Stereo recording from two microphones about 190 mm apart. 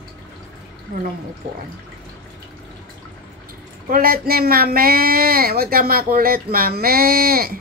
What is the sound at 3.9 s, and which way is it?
Speech, 50° right (ahead or behind).